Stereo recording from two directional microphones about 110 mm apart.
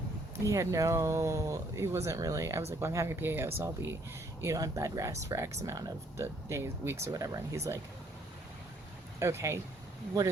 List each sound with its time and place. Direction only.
0.4 s speech: 30° right (ahead or behind)
9.1 s speech: 30° right (ahead or behind)